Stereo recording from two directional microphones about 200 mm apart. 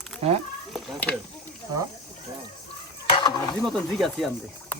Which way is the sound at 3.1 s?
25° left (ahead or behind).